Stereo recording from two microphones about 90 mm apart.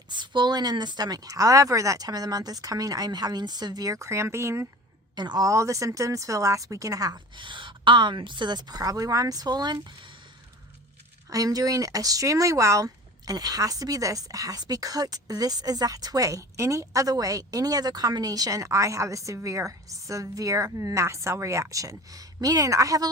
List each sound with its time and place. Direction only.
0.1 s speech: 55° right (ahead or behind); by 4.7 s 30° right (ahead or behind)
5.1 s speech: 55° right (ahead or behind)
5.5 s speech: 35° right (ahead or behind)
7.3 s a woman's voice: 65° right (ahead or behind)
11.3 s speech: 40° right (ahead or behind)